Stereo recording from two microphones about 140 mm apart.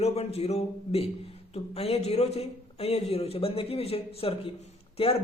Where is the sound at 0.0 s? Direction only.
50° left (ahead or behind).